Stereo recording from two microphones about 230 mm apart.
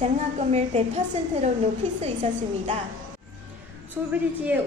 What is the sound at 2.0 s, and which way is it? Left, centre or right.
Female singing, right.